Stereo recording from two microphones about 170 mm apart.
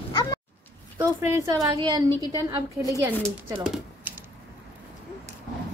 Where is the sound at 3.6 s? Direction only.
5° right (ahead or behind).